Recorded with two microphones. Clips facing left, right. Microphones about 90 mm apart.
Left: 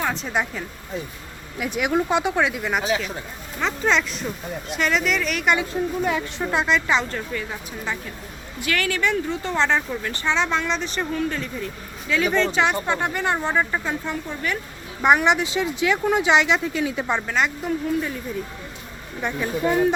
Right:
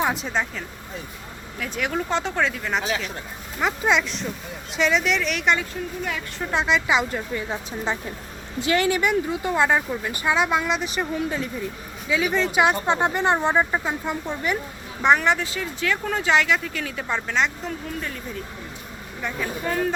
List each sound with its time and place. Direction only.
0.0 s speech: 5° right (ahead or behind)
1.5 s speech: 15° left (ahead or behind)
2.8 s a woman's voice: centre (ahead or behind)
3.6 s a woman's voice: 10° right (ahead or behind)
7.3 s speech: 20° right (ahead or behind); by 12.5 s 5° right (ahead or behind)
12.8 s speech: 20° right (ahead or behind)
15.0 s speech: 15° left (ahead or behind)
17.2 s speech: 5° left (ahead or behind)
19.2 s speech: 20° left (ahead or behind)